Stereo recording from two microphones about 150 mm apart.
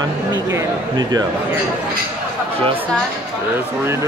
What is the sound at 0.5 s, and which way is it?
Speech, 25° right (ahead or behind).